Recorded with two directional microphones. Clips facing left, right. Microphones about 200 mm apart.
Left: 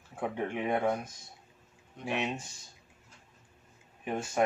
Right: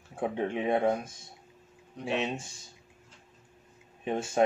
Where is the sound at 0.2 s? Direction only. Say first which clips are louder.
Right 3 dB; 25° right (ahead or behind).